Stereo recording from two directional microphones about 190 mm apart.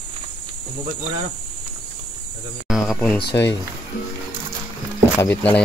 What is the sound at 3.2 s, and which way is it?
Speech, 65° left (ahead or behind).